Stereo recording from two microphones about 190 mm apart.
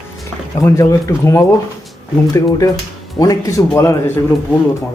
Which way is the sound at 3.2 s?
20° left (ahead or behind).